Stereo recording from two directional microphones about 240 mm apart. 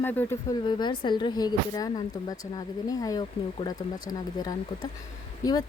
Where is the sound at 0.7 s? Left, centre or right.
Centre.